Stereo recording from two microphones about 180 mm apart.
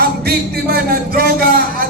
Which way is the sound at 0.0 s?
60° right (ahead or behind).